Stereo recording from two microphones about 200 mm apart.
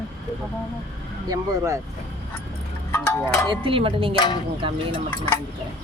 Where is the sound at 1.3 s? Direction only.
15° right (ahead or behind).